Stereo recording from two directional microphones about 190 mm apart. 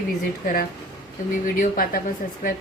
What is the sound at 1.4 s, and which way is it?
Speech, 50° left (ahead or behind).